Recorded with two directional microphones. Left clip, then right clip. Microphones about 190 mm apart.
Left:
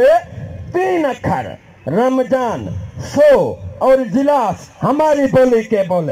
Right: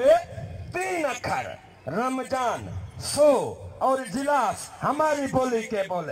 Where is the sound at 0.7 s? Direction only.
25° left (ahead or behind).